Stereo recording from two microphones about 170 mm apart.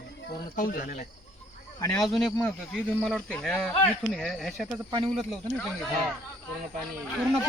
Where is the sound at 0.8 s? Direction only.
50° left (ahead or behind).